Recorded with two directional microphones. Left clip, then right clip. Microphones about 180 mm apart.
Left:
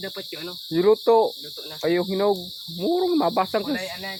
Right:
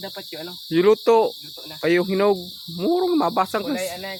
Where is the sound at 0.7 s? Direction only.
35° right (ahead or behind).